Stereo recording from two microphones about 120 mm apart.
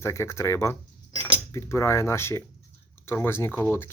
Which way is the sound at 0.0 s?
25° left (ahead or behind).